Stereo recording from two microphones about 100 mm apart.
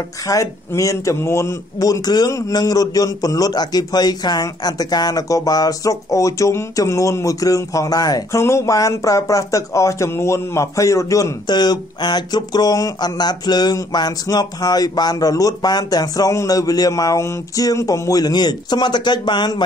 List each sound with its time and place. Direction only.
0.3 s a man's voice: 35° left (ahead or behind)